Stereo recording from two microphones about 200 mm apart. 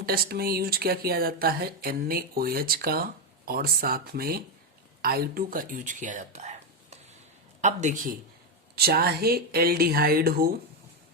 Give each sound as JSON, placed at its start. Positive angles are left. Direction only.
{"t": 0.0, "sound": "a man's voice", "side_deg": -50}
{"t": 8.7, "sound": "speech", "side_deg": -50}